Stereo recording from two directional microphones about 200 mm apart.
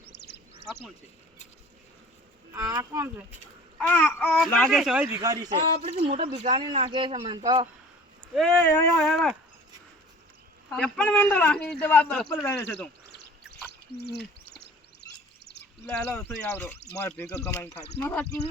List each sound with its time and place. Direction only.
2.5 s speech: 15° right (ahead or behind)
3.8 s a child's voice: 10° left (ahead or behind)
5.0 s speech: 15° right (ahead or behind)
8.4 s a child's voice: 5° left (ahead or behind)
8.6 s a man's voice: 15° left (ahead or behind)
9.0 s a child's voice: centre (ahead or behind)
10.7 s a man's voice: 5° left (ahead or behind)
13.1 s bird: 55° left (ahead or behind)
14.0 s a sound: 55° left (ahead or behind)
16.4 s a child's voice: 5° left (ahead or behind)